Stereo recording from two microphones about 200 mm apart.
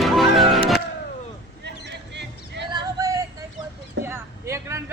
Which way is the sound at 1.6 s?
60° right (ahead or behind).